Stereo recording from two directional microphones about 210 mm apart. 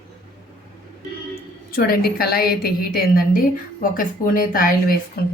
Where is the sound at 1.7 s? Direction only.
45° left (ahead or behind).